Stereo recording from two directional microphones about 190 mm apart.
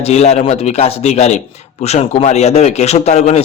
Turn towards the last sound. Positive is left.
turn(degrees=35)  # may be behind; listen again after turning